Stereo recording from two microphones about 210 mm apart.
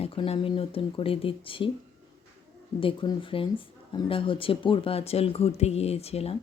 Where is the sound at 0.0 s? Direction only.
25° left (ahead or behind).